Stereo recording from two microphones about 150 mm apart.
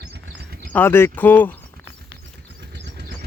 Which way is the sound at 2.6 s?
90° right.